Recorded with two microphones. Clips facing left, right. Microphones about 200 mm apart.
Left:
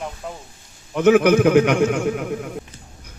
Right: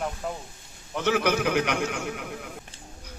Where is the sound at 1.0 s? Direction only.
50° left (ahead or behind).